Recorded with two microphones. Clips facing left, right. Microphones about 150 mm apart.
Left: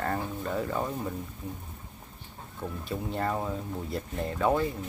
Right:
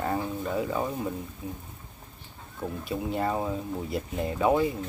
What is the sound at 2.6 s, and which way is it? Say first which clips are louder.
Speech: right 3 dB; 10° right (ahead or behind).